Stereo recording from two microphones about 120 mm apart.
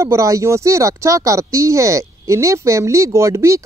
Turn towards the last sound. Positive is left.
turn(degrees=-25)  # may be behind; listen again after turning